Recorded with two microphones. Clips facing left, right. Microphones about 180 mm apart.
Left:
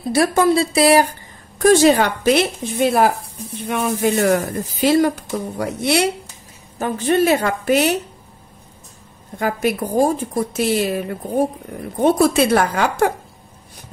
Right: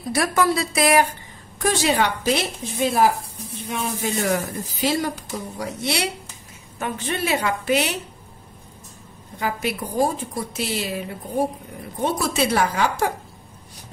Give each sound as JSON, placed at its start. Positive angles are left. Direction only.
{"t": 0.1, "sound": "speech", "side_deg": 30}
{"t": 1.6, "sound": "speech", "side_deg": 45}
{"t": 6.8, "sound": "speech", "side_deg": 40}
{"t": 9.4, "sound": "speech", "side_deg": 50}